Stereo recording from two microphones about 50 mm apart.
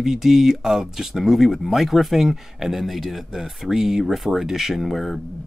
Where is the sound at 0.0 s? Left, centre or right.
Centre.